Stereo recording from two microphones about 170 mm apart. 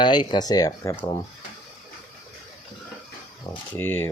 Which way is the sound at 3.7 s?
15° left (ahead or behind).